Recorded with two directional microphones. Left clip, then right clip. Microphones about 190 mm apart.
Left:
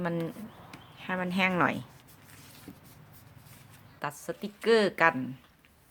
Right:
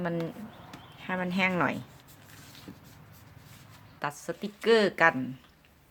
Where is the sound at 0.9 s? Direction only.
10° left (ahead or behind).